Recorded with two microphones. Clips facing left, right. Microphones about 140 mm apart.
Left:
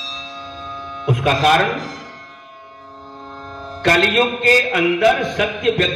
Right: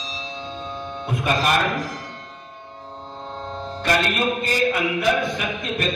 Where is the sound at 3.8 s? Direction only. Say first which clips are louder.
Left 6 dB; 75° left (ahead or behind).